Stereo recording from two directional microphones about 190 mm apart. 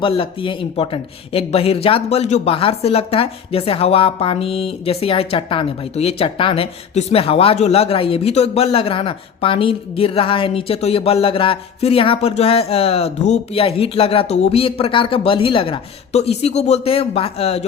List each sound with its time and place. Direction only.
0.0 s speech: 30° left (ahead or behind)